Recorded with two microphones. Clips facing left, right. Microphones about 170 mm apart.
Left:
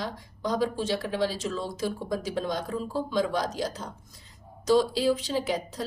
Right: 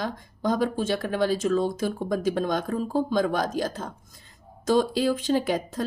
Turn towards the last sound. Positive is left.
turn(degrees=-50)  # may be behind; listen again after turning